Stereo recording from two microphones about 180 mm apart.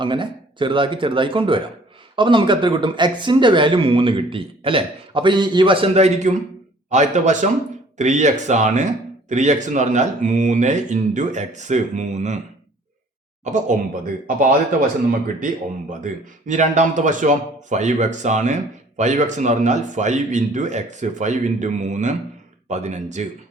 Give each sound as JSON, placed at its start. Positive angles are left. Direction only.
{"t": 0.0, "sound": "speech", "side_deg": -25}
{"t": 13.4, "sound": "speech", "side_deg": -45}
{"t": 15.9, "sound": "speech", "side_deg": -45}